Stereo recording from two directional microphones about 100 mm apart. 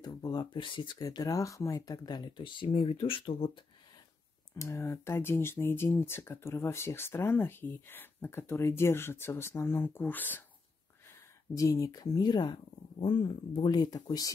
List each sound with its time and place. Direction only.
0.0 s speech: 45° left (ahead or behind)
0.9 s speech: 35° left (ahead or behind); by 3.6 s 60° left (ahead or behind)
4.6 s speech: 25° left (ahead or behind)
11.1 s speech: 30° left (ahead or behind); by 12.5 s 45° left (ahead or behind)
13.0 s speech: 60° left (ahead or behind); by 14.3 s 40° left (ahead or behind)